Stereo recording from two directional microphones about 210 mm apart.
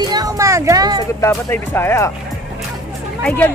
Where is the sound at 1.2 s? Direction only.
10° left (ahead or behind).